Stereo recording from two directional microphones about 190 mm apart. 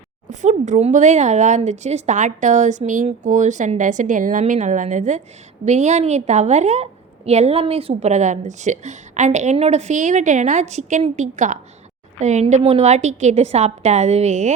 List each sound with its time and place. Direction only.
0.3 s speech: 40° right (ahead or behind)